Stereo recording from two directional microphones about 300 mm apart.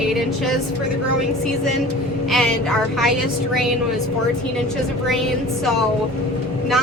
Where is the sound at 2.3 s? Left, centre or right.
Centre.